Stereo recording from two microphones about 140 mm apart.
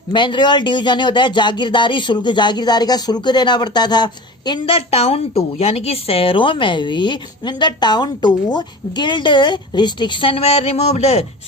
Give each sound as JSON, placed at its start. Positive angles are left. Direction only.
{"t": 0.1, "sound": "speech", "side_deg": 35}